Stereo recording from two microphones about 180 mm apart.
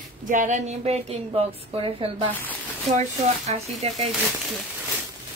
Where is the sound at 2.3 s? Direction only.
10° left (ahead or behind).